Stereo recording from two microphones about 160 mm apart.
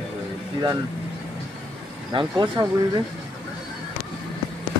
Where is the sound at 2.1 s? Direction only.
25° right (ahead or behind).